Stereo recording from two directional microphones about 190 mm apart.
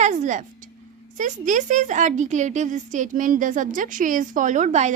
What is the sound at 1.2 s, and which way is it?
A woman's voice, 40° right (ahead or behind).